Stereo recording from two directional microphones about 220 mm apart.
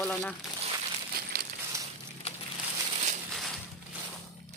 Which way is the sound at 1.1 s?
45° right (ahead or behind).